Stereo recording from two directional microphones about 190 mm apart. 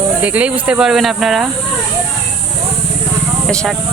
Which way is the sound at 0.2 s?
5° right (ahead or behind).